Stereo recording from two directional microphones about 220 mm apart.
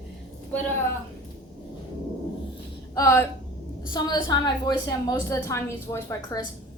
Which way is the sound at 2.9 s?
15° left (ahead or behind).